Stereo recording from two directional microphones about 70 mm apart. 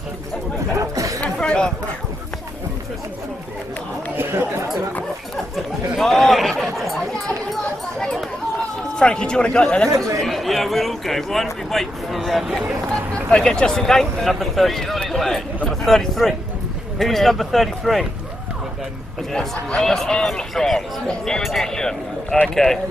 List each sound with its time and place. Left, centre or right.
0.7 s chatter: right
1.2 s speech: centre
4.2 s speech: right
5.9 s a man's voice: centre
9.8 s speech: right
10.1 s speech: centre
13.3 s speech: centre
19.3 s a man's voice: centre